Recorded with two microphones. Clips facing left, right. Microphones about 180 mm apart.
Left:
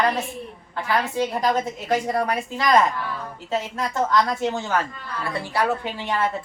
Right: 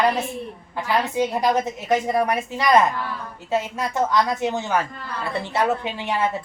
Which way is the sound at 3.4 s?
10° right (ahead or behind).